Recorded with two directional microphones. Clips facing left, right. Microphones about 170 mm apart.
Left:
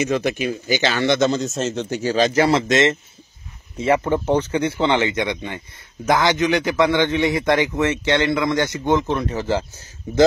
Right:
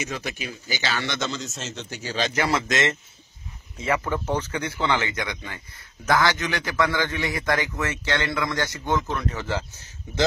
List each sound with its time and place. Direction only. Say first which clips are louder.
0.0 s a man's voice: left 11 dB; 50° left (ahead or behind); by 9.7 s 30° left (ahead or behind)